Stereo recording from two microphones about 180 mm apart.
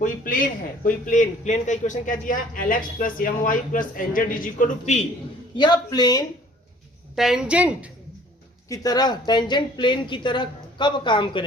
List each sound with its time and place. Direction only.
0.0 s a man's voice: 50° left (ahead or behind)
5.5 s a woman's voice: 25° left (ahead or behind)
7.2 s a woman's voice: 5° right (ahead or behind)
8.7 s a woman's voice: 20° left (ahead or behind)